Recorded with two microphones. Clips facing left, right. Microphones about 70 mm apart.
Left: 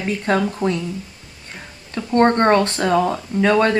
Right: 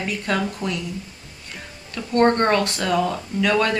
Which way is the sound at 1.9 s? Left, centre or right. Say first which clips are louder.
Left 2 dB; left.